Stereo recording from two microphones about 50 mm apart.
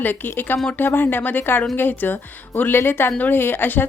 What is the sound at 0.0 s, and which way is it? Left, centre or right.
A woman's voice, left.